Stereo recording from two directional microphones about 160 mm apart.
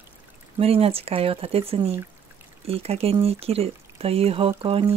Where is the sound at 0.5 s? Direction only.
35° right (ahead or behind).